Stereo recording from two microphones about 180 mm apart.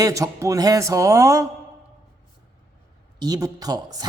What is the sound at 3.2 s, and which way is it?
Speech, 20° right (ahead or behind).